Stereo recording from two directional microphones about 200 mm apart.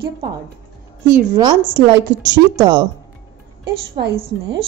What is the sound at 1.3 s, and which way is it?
Speech, 20° right (ahead or behind).